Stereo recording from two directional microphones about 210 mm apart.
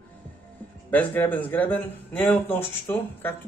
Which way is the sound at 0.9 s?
10° left (ahead or behind).